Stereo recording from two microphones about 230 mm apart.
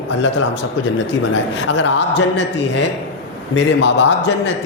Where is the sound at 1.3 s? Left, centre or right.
Left.